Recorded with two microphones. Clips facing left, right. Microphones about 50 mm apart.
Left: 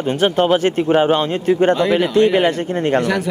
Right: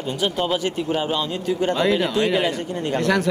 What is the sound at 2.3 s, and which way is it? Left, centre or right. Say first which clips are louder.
Speech: left 6 dB; left.